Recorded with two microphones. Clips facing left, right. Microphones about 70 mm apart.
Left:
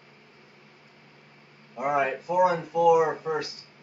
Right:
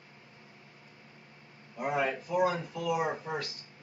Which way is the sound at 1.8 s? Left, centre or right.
Left.